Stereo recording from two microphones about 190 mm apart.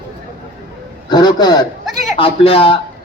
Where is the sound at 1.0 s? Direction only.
20° left (ahead or behind).